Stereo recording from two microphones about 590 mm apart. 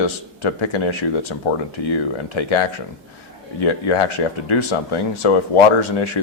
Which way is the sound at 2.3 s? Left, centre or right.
Left.